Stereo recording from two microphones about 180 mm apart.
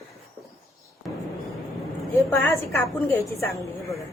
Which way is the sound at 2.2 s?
15° left (ahead or behind).